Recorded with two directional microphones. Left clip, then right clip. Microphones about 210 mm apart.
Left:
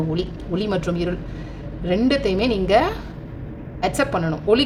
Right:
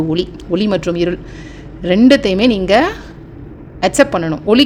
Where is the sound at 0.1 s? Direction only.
40° right (ahead or behind).